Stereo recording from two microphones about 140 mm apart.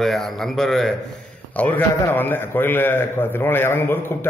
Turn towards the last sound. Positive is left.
turn(degrees=15)  # may be behind; listen again after turning